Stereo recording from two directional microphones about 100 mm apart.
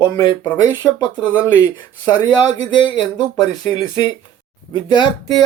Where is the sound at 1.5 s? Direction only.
40° left (ahead or behind).